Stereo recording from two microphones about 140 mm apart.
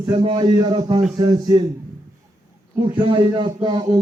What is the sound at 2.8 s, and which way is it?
A man's voice, 35° right (ahead or behind).